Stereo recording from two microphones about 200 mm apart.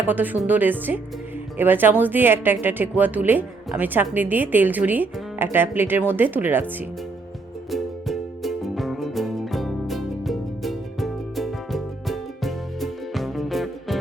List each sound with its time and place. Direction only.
0.0 s speech: 10° right (ahead or behind)
7.7 s music: centre (ahead or behind)